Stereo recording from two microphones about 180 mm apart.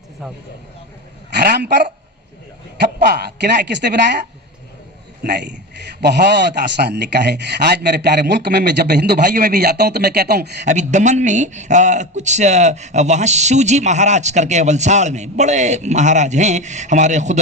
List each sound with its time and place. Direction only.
1.4 s speech: 65° right (ahead or behind)
3.0 s speech: 65° right (ahead or behind)
5.2 s a man's voice: 65° right (ahead or behind)
10.7 s speech: 40° right (ahead or behind)